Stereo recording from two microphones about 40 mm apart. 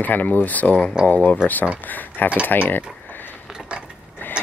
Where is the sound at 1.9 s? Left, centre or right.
Left.